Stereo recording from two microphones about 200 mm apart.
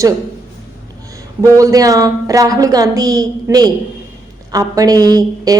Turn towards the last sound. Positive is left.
turn(degrees=-20)  # may be behind; listen again after turning